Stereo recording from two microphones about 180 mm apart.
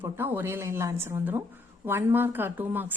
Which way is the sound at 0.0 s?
10° right (ahead or behind).